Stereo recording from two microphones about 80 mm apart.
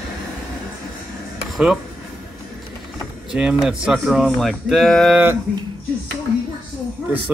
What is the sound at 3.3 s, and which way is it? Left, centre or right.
Speech, centre.